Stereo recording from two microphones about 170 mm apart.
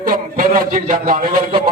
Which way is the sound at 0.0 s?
55° right (ahead or behind).